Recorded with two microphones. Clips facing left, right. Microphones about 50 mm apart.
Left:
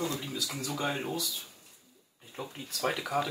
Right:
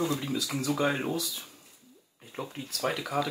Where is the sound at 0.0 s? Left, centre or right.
Right.